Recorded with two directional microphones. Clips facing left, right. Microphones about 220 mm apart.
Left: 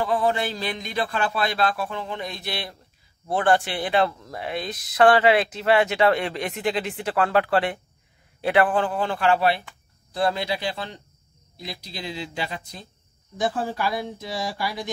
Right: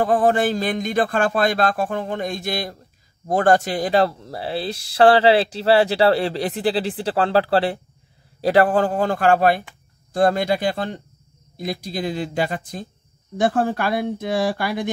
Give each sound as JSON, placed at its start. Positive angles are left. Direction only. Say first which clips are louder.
{"t": 0.0, "sound": "speech", "louder": "right 6 dB", "side_deg": -50}